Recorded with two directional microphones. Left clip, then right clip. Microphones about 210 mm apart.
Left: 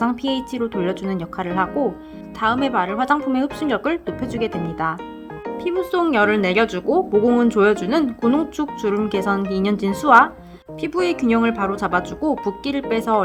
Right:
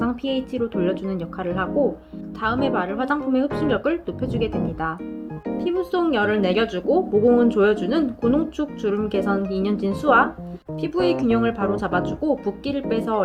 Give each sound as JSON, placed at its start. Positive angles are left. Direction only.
{"t": 0.0, "sound": "speech", "side_deg": 35}